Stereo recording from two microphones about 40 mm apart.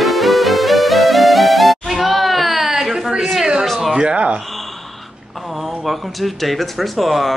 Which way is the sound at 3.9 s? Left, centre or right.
Right.